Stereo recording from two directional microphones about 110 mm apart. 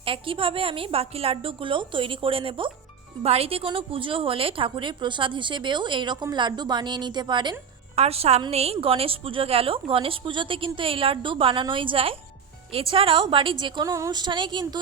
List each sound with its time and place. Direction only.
0.0 s a woman's voice: 55° right (ahead or behind)
3.2 s a woman's voice: 65° right (ahead or behind); by 7.5 s 45° right (ahead or behind)
7.9 s a woman's voice: 70° right (ahead or behind); by 13.8 s 45° right (ahead or behind)
13.8 s speech: 30° right (ahead or behind)
14.1 s a woman's voice: 40° right (ahead or behind)